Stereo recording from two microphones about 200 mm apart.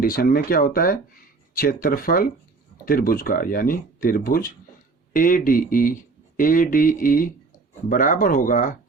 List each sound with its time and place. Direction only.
0.0 s speech: 45° left (ahead or behind)